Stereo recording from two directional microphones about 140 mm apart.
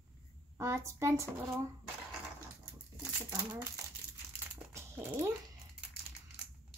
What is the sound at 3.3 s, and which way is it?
Speech, 20° right (ahead or behind).